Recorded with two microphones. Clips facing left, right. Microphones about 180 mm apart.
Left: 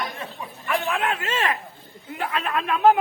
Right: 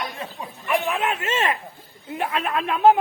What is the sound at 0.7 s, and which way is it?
Speech, 20° right (ahead or behind).